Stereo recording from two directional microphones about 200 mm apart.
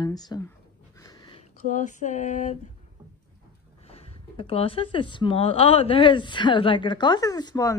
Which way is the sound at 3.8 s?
30° left (ahead or behind).